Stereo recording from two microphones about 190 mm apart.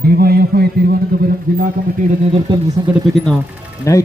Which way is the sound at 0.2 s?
55° right (ahead or behind).